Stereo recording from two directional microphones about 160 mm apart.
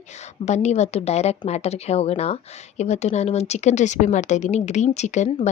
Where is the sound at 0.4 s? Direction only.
45° left (ahead or behind).